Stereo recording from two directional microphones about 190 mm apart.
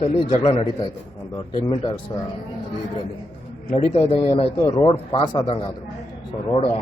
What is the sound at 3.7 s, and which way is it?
A man's voice, 30° left (ahead or behind).